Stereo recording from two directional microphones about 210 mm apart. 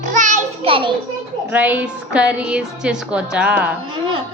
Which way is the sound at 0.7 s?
25° right (ahead or behind).